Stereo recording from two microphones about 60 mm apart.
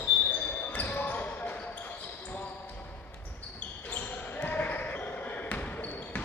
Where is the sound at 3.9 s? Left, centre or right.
Left.